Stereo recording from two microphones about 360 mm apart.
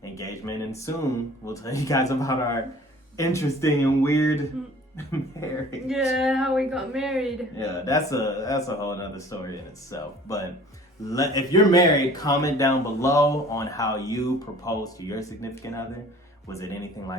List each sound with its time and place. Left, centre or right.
0.0 s speech: centre
5.4 s speech: centre